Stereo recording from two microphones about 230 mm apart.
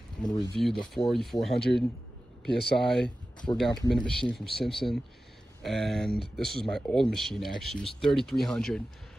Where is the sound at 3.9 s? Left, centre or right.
Centre.